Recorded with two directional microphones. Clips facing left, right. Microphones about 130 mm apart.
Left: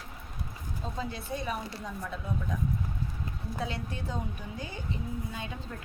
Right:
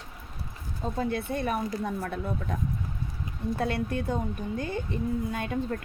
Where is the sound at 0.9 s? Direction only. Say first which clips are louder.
Right 7 dB; 55° right (ahead or behind).